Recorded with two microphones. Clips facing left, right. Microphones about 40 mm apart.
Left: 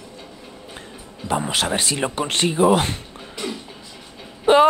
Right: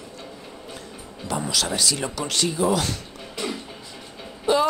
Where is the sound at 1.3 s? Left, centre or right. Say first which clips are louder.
Left 4 dB; left.